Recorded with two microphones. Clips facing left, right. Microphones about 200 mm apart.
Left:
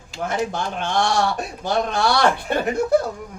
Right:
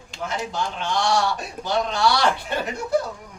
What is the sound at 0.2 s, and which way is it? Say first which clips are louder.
A man's voice: left 4 dB; 55° left (ahead or behind).